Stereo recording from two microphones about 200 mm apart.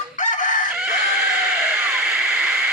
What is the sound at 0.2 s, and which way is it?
Chicken, 40° left (ahead or behind).